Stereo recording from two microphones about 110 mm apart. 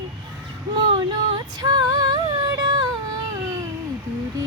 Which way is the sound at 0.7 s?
45° right (ahead or behind).